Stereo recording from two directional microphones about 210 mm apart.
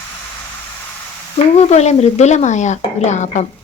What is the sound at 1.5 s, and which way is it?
A woman's voice, 30° left (ahead or behind).